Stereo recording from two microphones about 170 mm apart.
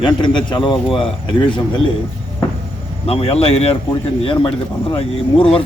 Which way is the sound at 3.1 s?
35° left (ahead or behind).